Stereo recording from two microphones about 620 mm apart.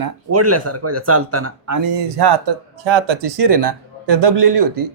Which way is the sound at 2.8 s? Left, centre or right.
Right.